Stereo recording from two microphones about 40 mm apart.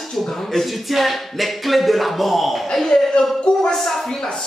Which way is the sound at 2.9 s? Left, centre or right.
Centre.